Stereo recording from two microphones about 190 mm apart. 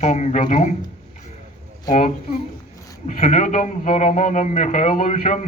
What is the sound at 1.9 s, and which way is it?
A man's voice, 40° left (ahead or behind).